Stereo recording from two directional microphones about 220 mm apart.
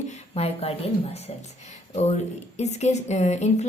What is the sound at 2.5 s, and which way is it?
Speech, 30° left (ahead or behind).